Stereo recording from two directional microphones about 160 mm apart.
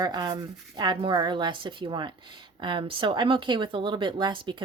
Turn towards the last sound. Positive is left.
turn(degrees=-30)  # may be behind; listen again after turning